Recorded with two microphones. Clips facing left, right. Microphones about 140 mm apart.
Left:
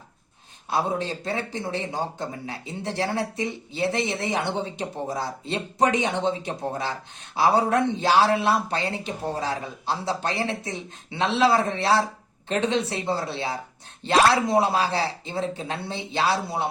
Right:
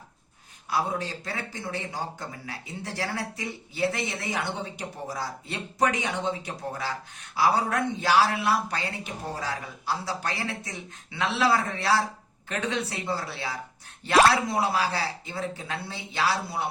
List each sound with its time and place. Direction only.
0.7 s speech: 25° left (ahead or behind)